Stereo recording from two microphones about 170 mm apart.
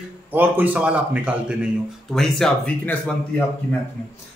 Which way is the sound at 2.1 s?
Centre (ahead or behind).